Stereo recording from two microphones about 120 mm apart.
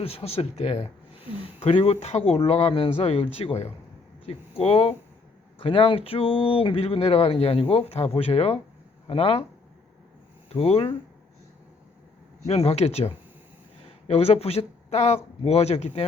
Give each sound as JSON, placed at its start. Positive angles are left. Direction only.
{"t": 0.0, "sound": "speech", "side_deg": 55}
{"t": 10.5, "sound": "speech", "side_deg": 55}
{"t": 12.5, "sound": "speech", "side_deg": 60}